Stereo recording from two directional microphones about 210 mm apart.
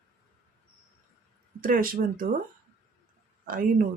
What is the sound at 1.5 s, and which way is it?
Speech, 45° right (ahead or behind).